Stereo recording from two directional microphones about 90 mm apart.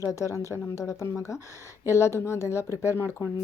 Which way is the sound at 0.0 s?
35° left (ahead or behind).